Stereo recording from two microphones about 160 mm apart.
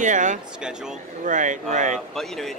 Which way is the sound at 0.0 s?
50° right (ahead or behind).